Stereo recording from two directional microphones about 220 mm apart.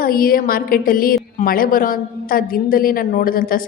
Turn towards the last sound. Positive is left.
turn(degrees=40)  # may be behind; listen again after turning